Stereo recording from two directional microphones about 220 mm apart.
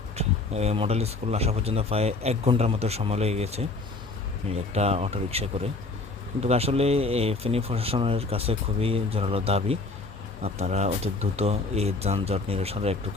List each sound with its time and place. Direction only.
0.2 s speech: 30° right (ahead or behind)